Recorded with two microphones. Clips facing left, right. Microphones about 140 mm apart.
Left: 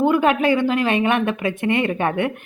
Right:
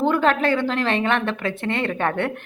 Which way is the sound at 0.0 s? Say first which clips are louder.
Left 2 dB; 10° left (ahead or behind).